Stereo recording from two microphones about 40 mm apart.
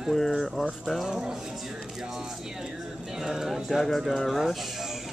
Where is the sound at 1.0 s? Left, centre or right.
Centre.